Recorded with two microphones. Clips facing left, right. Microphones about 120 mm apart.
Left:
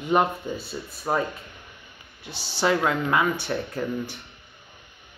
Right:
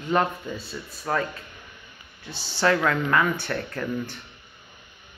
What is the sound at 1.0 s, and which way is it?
Speech, 20° left (ahead or behind).